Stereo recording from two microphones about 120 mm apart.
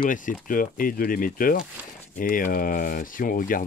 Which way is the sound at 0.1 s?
90° left.